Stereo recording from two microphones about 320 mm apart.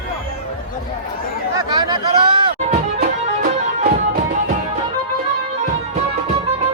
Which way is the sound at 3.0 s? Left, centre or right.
Right.